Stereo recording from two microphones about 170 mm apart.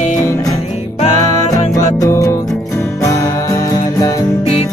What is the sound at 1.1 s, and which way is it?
Music, 45° right (ahead or behind).